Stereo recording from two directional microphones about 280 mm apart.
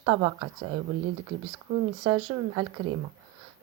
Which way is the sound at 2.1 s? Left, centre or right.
Centre.